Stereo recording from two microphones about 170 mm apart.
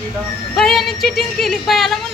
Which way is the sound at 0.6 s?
Centre (ahead or behind).